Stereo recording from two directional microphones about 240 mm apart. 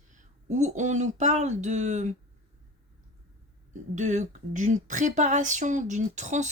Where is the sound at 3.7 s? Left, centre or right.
Right.